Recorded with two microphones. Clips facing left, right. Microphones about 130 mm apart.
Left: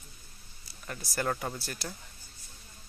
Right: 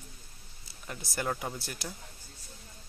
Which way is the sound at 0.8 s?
15° right (ahead or behind).